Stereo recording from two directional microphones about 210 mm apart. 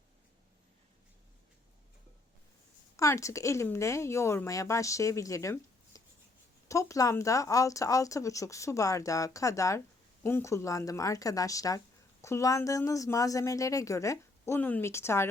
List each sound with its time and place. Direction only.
2.9 s speech: 15° left (ahead or behind)